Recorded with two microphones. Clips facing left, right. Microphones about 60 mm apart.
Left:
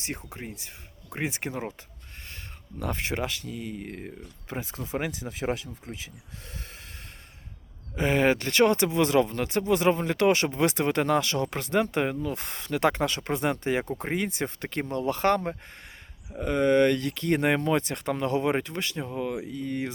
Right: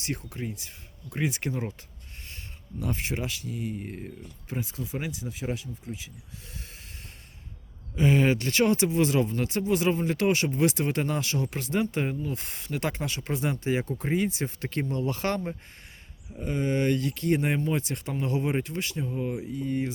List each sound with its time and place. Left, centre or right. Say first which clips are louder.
0.0 s speech: right 3 dB; left
2.7 s speech: left 1 dB; left
4.0 s speech: left 1 dB; left
7.9 s speech: even; left
13.8 s speech: right 2 dB; left
16.3 s speech: left 6 dB; left